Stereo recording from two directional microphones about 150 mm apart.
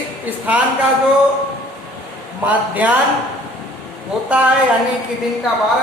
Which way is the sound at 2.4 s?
10° right (ahead or behind).